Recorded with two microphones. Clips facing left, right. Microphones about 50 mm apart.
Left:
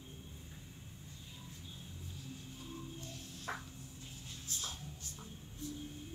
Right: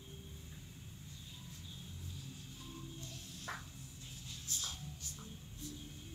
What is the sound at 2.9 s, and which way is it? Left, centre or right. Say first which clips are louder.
Music: left 2 dB; left.